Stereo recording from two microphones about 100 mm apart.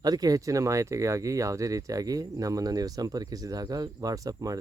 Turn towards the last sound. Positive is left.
turn(degrees=-35)  # may be behind; listen again after turning